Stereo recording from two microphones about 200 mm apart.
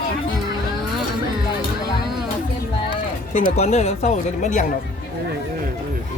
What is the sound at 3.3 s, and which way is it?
Speech, 35° left (ahead or behind).